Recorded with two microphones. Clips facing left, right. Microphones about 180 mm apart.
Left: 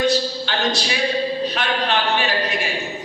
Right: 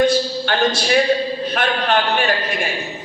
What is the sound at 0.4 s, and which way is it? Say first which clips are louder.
Speech: right 4 dB; 50° right (ahead or behind).